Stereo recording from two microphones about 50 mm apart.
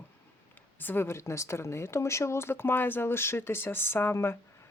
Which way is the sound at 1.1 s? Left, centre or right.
Left.